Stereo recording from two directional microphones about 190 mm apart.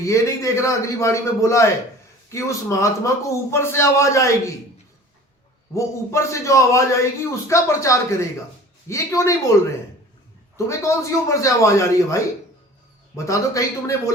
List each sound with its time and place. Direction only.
0.0 s a man's voice: 15° left (ahead or behind)
5.7 s a man's voice: 15° left (ahead or behind)
10.7 s a man's voice: 15° left (ahead or behind)